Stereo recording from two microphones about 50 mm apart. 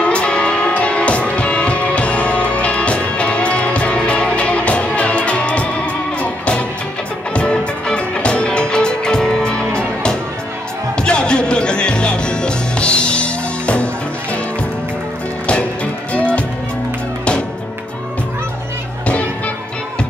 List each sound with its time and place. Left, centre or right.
0.0 s music: left
11.0 s music: centre
15.4 s music: left
19.0 s music: left